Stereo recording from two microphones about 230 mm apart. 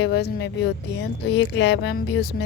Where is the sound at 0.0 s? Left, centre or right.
Left.